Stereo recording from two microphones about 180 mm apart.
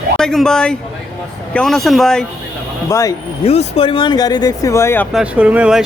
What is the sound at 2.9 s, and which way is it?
Speech, 20° left (ahead or behind).